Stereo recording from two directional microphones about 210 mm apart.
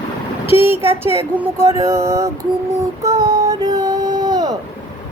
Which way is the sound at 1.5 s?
15° right (ahead or behind).